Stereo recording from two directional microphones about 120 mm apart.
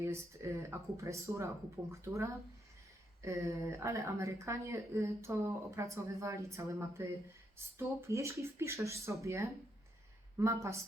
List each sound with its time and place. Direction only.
0.0 s speech: 20° right (ahead or behind)